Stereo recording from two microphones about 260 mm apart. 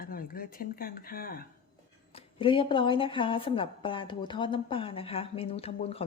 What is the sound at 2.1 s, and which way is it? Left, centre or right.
A woman's voice, centre.